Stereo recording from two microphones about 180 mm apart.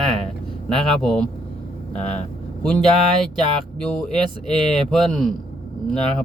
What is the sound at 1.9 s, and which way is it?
Speech, 40° left (ahead or behind).